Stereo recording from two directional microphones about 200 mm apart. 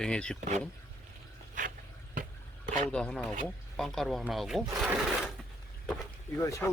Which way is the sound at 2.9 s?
5° left (ahead or behind).